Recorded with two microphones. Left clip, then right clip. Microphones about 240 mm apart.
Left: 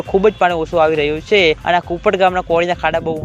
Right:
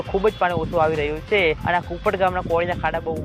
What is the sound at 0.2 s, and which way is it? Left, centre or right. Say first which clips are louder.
Speech: left 7 dB; left.